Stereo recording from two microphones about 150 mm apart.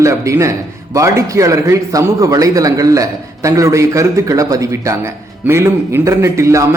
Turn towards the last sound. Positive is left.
turn(degrees=-20)  # may be behind; listen again after turning